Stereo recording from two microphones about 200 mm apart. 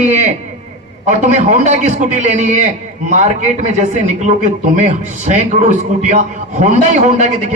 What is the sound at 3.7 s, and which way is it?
A man's voice, 35° right (ahead or behind).